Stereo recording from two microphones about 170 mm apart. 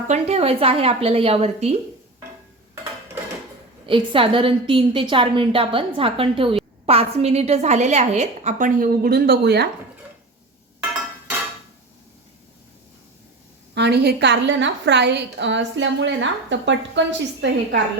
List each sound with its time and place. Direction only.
0.1 s a woman's voice: 35° right (ahead or behind)
3.8 s a woman's voice: 30° right (ahead or behind); by 9.6 s 75° right (ahead or behind)
13.7 s a woman's voice: 80° right